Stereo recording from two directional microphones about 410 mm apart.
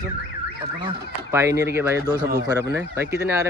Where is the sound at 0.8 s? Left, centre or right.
Centre.